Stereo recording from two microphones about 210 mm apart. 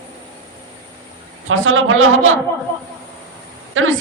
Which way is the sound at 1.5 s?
70° right (ahead or behind).